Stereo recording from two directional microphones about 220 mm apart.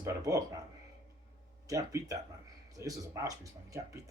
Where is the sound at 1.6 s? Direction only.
15° right (ahead or behind).